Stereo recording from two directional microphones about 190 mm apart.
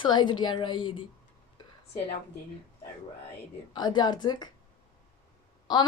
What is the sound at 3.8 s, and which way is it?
Speech, 20° left (ahead or behind).